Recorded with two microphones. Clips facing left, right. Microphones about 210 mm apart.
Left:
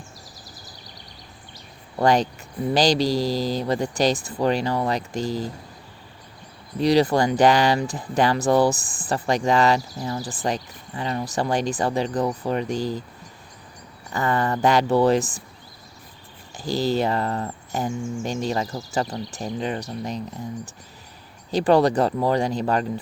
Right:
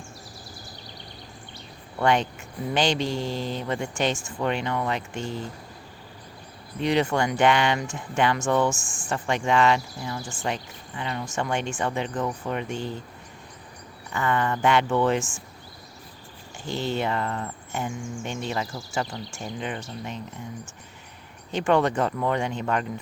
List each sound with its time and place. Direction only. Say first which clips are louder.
2.0 s speech: left 3 dB; 35° left (ahead or behind)
6.7 s speech: left 5 dB; 35° left (ahead or behind)
14.1 s speech: left 2 dB; 35° left (ahead or behind)
16.6 s speech: left 5 dB; 35° left (ahead or behind)
21.5 s speech: left 4 dB; 35° left (ahead or behind)